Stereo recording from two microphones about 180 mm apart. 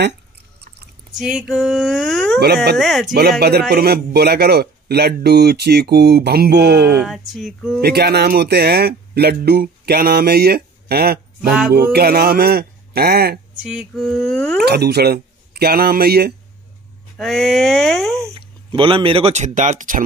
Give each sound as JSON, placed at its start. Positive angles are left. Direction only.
{"t": 1.1, "sound": "speech", "side_deg": -5}
{"t": 2.4, "sound": "speech", "side_deg": -65}
{"t": 2.8, "sound": "speech", "side_deg": 0}
{"t": 3.2, "sound": "speech", "side_deg": -65}
{"t": 7.0, "sound": "speech", "side_deg": 0}
{"t": 7.8, "sound": "speech", "side_deg": -65}
{"t": 13.7, "sound": "speech", "side_deg": -5}
{"t": 14.6, "sound": "speech", "side_deg": -65}
{"t": 17.2, "sound": "speech", "side_deg": 0}
{"t": 18.3, "sound": "speech", "side_deg": -30}